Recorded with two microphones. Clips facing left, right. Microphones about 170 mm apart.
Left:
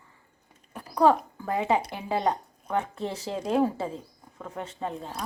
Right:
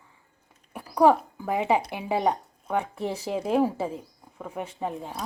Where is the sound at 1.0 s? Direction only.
15° right (ahead or behind).